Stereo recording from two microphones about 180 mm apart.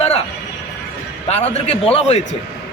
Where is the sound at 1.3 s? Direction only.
35° left (ahead or behind).